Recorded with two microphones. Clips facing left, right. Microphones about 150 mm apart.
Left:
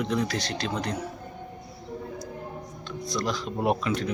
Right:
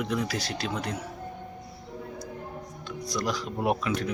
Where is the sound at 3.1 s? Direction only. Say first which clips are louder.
Left 1 dB; 10° right (ahead or behind).